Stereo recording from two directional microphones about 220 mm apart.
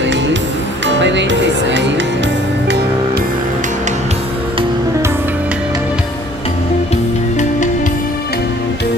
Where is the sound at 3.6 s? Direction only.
30° right (ahead or behind).